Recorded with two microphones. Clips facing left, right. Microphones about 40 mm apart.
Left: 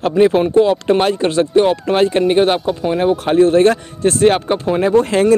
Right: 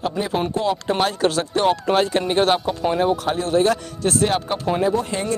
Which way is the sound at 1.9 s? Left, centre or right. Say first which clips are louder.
Left 5 dB; left.